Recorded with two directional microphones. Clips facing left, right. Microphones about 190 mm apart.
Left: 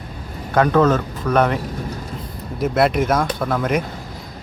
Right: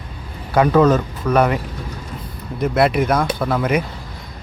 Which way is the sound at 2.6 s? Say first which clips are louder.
Right 1 dB; centre (ahead or behind).